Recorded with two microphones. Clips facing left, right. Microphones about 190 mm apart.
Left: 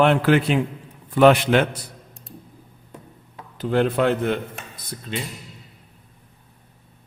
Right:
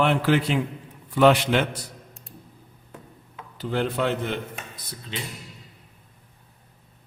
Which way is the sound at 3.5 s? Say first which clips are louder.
Left 6 dB; 55° left (ahead or behind).